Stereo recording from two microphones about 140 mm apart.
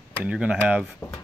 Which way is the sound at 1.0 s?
25° left (ahead or behind).